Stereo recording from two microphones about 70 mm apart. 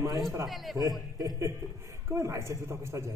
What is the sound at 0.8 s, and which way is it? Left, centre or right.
Speech, right.